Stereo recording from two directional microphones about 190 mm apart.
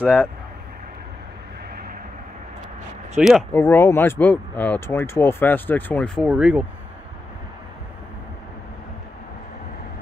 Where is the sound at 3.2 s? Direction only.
5° right (ahead or behind).